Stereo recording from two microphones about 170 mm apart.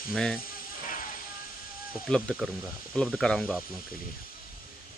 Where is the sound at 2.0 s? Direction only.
5° left (ahead or behind).